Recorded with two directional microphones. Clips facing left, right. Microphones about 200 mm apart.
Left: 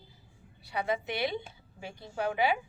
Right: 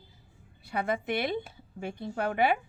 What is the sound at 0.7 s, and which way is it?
A woman's voice, 50° right (ahead or behind).